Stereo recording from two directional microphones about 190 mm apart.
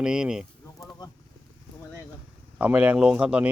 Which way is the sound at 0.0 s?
5° right (ahead or behind).